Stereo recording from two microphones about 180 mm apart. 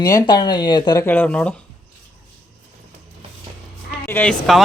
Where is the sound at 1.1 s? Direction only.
10° left (ahead or behind).